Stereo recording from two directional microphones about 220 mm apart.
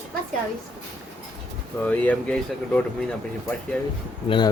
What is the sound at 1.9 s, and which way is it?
Speech, 5° left (ahead or behind).